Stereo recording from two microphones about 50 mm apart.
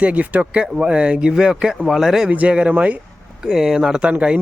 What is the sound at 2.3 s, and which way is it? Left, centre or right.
Speech, right.